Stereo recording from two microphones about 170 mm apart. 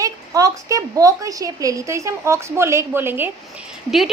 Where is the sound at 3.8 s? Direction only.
Centre (ahead or behind).